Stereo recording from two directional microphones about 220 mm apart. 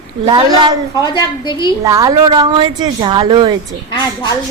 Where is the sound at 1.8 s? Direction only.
15° right (ahead or behind).